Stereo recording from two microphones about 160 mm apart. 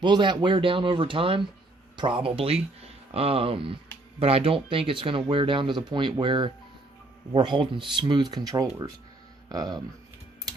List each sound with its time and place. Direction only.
0.0 s speech: 30° right (ahead or behind)